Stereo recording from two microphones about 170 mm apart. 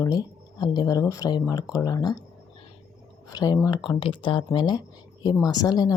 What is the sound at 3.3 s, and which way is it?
Speech, 20° left (ahead or behind).